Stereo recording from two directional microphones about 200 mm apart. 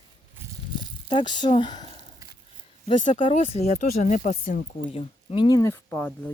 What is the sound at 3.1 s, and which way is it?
A woman's voice, 25° left (ahead or behind).